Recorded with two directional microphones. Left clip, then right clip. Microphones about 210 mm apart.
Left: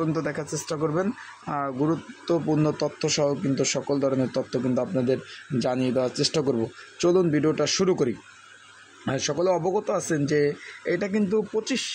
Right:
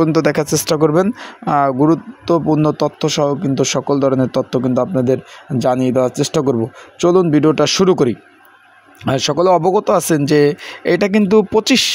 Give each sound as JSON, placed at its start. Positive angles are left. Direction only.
{"t": 0.0, "sound": "speech", "side_deg": -45}